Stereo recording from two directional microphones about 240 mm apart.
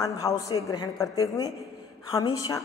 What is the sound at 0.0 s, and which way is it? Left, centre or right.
A woman's voice, centre.